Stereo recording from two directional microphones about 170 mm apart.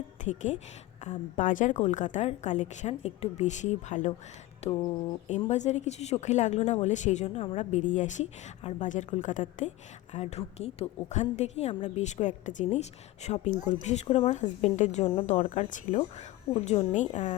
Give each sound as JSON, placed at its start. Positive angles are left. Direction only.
{"t": 0.3, "sound": "a woman's voice", "side_deg": 45}